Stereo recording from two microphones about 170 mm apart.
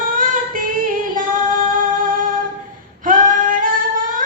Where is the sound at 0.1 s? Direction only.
55° right (ahead or behind).